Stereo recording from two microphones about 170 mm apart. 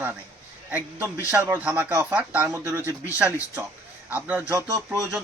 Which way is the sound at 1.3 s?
10° right (ahead or behind).